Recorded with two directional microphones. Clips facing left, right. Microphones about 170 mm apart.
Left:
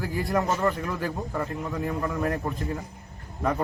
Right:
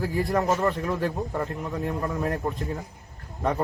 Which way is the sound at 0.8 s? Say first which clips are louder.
Right 3 dB; 20° right (ahead or behind).